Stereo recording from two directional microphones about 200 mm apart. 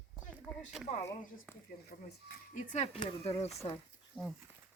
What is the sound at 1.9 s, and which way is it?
Speech, 35° left (ahead or behind).